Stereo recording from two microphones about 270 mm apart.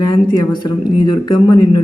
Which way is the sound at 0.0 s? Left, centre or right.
Centre.